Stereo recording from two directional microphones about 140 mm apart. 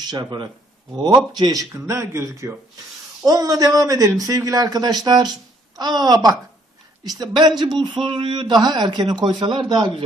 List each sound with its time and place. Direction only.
0.1 s a man's voice: 35° right (ahead or behind)